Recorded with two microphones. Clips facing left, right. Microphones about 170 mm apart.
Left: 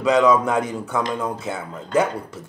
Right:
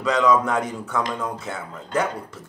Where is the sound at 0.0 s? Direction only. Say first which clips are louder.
Left 3 dB; 10° left (ahead or behind).